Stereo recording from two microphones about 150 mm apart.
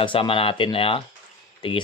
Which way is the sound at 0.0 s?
35° left (ahead or behind).